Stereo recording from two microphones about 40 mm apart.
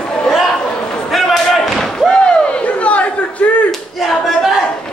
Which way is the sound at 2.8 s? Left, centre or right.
Left.